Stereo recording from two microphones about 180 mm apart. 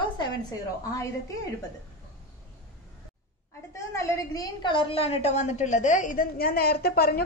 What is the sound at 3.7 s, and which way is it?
A woman's voice, 15° left (ahead or behind).